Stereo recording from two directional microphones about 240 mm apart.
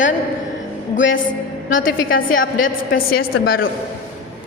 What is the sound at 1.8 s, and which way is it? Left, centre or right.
Speech, left.